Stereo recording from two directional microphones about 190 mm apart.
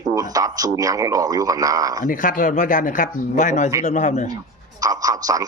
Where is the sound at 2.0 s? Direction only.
45° left (ahead or behind).